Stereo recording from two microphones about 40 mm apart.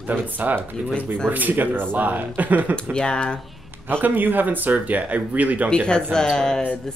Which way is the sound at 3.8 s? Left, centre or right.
Right.